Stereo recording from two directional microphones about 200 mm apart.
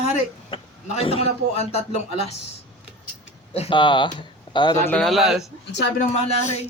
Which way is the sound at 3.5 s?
25° left (ahead or behind).